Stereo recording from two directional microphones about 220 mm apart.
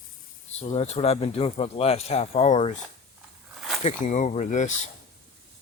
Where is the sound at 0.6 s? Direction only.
30° left (ahead or behind).